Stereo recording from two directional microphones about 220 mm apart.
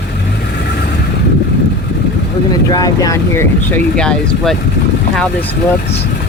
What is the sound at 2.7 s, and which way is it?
Speech, 15° left (ahead or behind).